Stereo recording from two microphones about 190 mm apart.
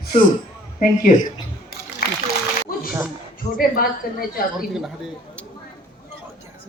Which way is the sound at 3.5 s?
50° left (ahead or behind).